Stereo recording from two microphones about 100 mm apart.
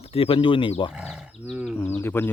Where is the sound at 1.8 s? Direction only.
20° left (ahead or behind).